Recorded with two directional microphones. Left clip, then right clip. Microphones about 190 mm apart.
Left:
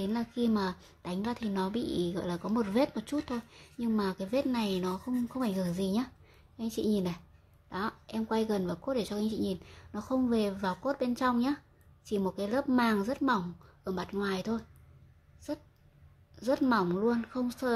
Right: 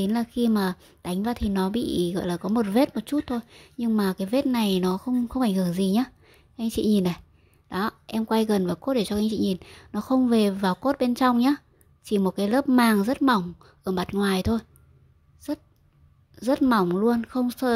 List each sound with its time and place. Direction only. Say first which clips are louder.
0.0 s a woman's voice: right 7 dB; 35° right (ahead or behind)